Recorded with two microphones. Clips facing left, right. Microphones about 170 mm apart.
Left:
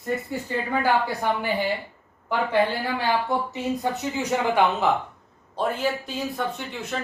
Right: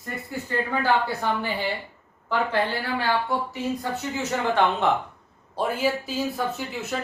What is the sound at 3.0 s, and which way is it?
Speech, 20° left (ahead or behind).